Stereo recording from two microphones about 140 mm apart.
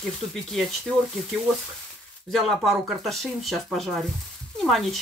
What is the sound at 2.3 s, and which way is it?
Speech, centre (ahead or behind).